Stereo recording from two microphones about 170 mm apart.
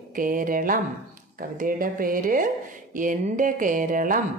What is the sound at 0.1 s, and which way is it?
Speech, 55° right (ahead or behind).